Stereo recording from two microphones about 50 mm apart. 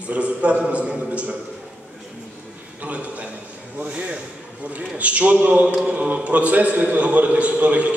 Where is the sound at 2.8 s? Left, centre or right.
Right.